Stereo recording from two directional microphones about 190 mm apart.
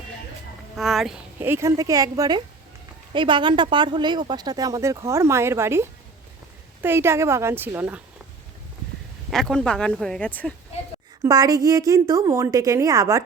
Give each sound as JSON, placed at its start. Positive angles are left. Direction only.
{"t": 0.8, "sound": "a woman's voice", "side_deg": 0}
{"t": 9.3, "sound": "speech", "side_deg": 0}
{"t": 11.2, "sound": "a woman's voice", "side_deg": -20}